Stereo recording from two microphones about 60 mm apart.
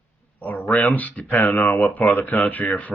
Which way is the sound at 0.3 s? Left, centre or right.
Left.